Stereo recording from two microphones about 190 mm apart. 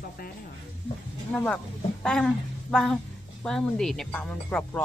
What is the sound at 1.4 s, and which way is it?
A woman's voice, 5° left (ahead or behind).